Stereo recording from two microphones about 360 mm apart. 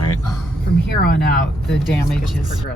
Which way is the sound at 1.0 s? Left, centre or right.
Left.